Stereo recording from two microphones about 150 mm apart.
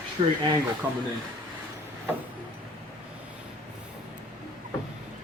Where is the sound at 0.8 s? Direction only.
15° right (ahead or behind).